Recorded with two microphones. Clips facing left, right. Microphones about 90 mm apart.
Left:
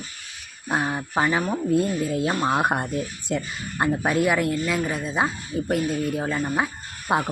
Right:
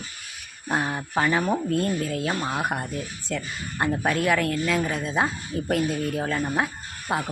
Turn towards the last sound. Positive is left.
turn(degrees=20)  # may be behind; listen again after turning